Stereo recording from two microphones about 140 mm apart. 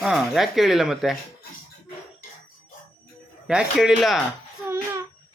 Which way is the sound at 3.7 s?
5° right (ahead or behind).